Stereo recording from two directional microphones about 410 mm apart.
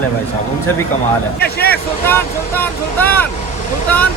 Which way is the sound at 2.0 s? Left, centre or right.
Centre.